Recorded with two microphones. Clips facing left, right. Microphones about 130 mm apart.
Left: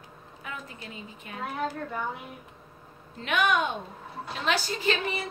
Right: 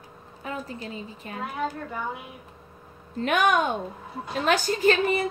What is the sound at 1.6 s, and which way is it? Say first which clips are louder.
Speech: right 2 dB; 5° right (ahead or behind).